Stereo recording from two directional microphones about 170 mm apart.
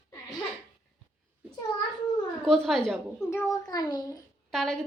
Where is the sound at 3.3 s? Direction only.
20° left (ahead or behind).